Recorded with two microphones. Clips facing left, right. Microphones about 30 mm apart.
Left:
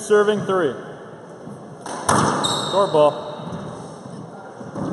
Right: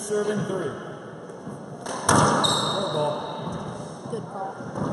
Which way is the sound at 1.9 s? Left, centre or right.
Centre.